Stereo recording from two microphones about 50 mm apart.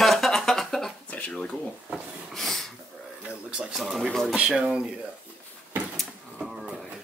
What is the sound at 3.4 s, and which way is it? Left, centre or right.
Speech, right.